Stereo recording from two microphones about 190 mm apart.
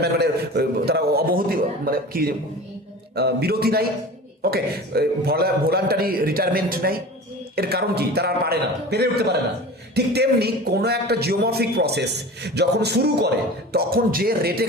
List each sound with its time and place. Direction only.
0.0 s a man's voice: 60° right (ahead or behind)